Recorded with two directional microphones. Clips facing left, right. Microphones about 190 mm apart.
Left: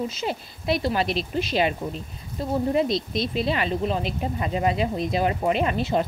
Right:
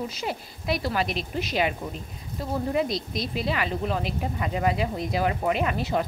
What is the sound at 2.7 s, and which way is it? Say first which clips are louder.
Speech: left 3 dB; 25° left (ahead or behind).